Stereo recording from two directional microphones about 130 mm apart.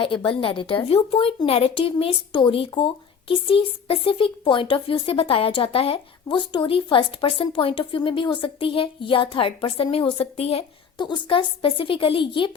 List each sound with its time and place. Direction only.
0.0 s speech: 40° left (ahead or behind)
10.9 s a woman's voice: 35° left (ahead or behind)